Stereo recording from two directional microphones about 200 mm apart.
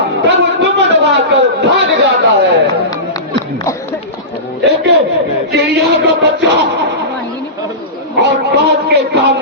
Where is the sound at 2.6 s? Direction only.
20° left (ahead or behind).